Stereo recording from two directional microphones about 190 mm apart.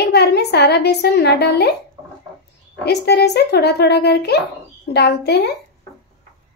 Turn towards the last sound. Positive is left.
turn(degrees=60)  # may be behind; listen again after turning